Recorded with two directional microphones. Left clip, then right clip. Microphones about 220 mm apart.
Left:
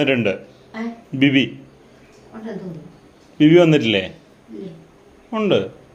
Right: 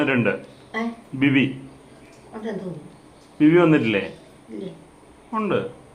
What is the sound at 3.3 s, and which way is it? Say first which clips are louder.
Speech: left 4 dB; 60° left (ahead or behind).